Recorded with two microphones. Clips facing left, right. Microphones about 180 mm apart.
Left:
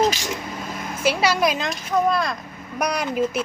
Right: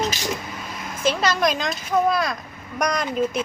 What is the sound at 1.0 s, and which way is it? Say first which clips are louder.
Speech: left 1 dB; 10° left (ahead or behind).